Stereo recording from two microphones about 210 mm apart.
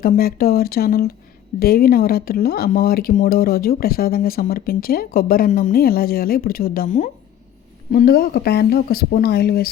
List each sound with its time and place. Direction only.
0.0 s speech: 45° left (ahead or behind)